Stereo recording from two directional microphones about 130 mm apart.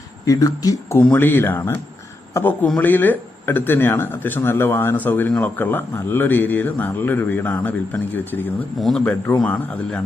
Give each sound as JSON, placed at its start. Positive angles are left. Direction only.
{"t": 0.3, "sound": "speech", "side_deg": 25}
{"t": 0.9, "sound": "speech", "side_deg": 15}
{"t": 8.8, "sound": "speech", "side_deg": 5}